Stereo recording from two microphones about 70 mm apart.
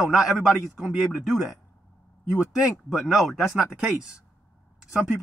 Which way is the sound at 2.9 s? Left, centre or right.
Centre.